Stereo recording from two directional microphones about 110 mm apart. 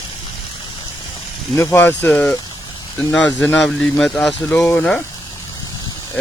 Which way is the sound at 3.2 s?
5° left (ahead or behind).